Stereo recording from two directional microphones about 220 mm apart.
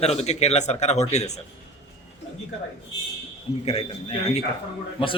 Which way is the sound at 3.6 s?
30° left (ahead or behind).